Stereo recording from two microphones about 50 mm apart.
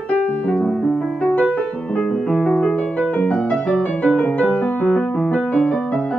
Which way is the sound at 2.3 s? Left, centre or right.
Centre.